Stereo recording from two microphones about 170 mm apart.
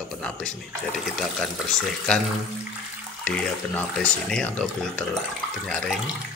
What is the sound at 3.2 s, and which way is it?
Speech, 5° left (ahead or behind).